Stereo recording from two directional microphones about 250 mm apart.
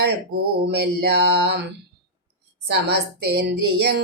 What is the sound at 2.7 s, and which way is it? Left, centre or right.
Mantra, right.